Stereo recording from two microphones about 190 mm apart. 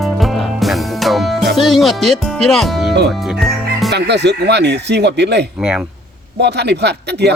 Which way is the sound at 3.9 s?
65° right (ahead or behind).